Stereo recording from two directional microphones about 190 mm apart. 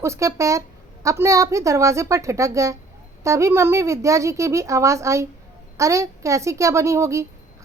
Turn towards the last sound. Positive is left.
turn(degrees=-15)  # may be behind; listen again after turning